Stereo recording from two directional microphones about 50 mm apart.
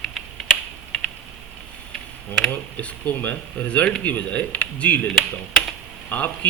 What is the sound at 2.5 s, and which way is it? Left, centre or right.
Speech, left.